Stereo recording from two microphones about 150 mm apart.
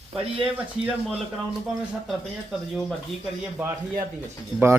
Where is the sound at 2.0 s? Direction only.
Centre (ahead or behind).